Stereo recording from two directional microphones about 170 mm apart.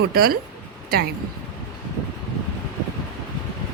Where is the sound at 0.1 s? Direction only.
65° right (ahead or behind).